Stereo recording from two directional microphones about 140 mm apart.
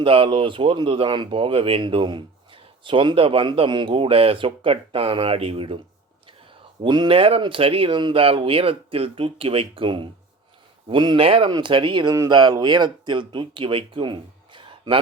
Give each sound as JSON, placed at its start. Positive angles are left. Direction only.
{"t": 0.0, "sound": "speech", "side_deg": -40}
{"t": 6.8, "sound": "speech", "side_deg": -35}